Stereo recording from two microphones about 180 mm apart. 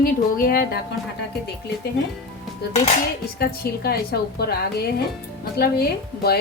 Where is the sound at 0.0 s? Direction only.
55° left (ahead or behind).